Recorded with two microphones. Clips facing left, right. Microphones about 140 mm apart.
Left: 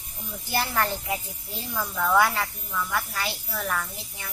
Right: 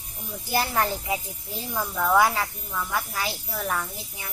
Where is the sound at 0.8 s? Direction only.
10° right (ahead or behind).